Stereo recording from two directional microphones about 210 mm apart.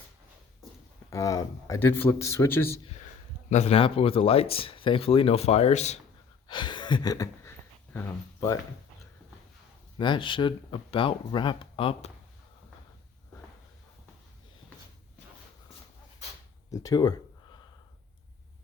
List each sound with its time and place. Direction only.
1.1 s a man's voice: 15° left (ahead or behind)
3.5 s speech: 30° left (ahead or behind)
6.5 s a sound: 20° left (ahead or behind)
7.9 s speech: 15° left (ahead or behind)
10.0 s speech: 25° left (ahead or behind)
16.7 s a sound: 15° left (ahead or behind)